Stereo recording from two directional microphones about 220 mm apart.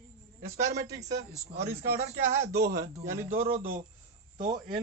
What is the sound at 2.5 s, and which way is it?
Speech, 45° right (ahead or behind).